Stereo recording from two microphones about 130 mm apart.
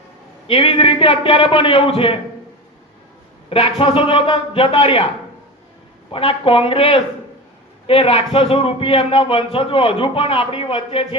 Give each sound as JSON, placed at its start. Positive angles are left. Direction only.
{"t": 0.4, "sound": "a man's voice", "side_deg": 45}
{"t": 3.5, "sound": "a man's voice", "side_deg": 45}
{"t": 6.1, "sound": "a man's voice", "side_deg": 45}